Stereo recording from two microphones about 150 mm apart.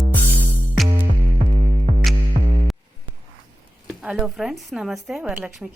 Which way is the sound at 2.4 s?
45° right (ahead or behind).